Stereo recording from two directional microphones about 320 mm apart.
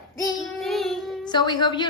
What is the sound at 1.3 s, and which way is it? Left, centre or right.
Speech, centre.